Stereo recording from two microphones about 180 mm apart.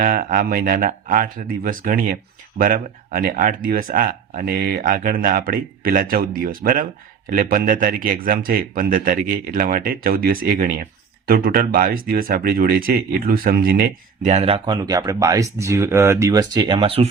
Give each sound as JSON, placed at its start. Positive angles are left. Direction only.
{"t": 0.0, "sound": "speech", "side_deg": -50}